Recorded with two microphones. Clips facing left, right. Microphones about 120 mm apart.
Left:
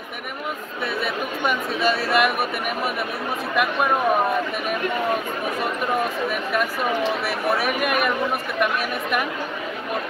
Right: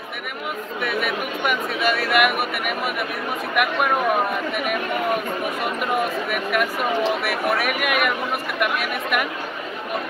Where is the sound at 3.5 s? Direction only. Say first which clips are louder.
Right 1 dB; 25° left (ahead or behind).